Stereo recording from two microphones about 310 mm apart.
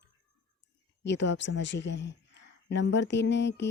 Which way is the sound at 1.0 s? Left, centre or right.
Left.